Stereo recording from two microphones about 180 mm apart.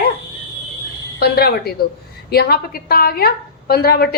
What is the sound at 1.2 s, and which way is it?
A woman's voice, 60° left (ahead or behind).